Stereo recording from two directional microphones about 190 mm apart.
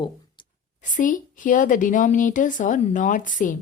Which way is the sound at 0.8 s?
45° left (ahead or behind).